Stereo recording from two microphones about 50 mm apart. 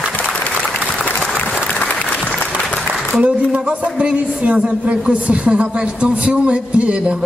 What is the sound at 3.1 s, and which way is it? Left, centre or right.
A man's voice, right.